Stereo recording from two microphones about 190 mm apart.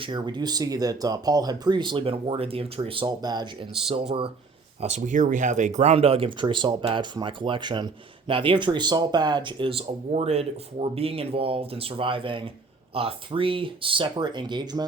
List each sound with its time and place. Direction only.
0.0 s speech: 25° right (ahead or behind)
4.8 s speech: 40° right (ahead or behind); by 14.8 s 20° right (ahead or behind)